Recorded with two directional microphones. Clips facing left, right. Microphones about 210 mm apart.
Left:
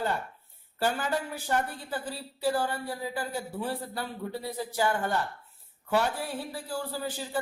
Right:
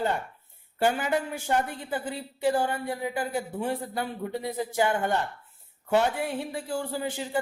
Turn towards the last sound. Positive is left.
turn(degrees=-20)  # may be behind; listen again after turning